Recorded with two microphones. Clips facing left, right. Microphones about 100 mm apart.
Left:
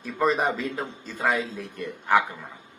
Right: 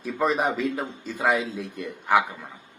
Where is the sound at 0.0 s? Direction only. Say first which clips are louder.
Even; 10° right (ahead or behind).